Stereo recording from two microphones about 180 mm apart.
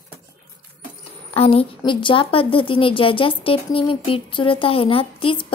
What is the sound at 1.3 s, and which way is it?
A woman's voice, 35° left (ahead or behind).